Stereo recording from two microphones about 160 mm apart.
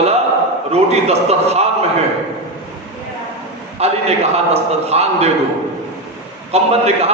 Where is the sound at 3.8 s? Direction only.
40° right (ahead or behind).